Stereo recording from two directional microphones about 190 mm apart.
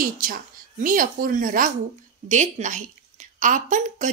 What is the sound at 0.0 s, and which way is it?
A woman's voice, 45° right (ahead or behind).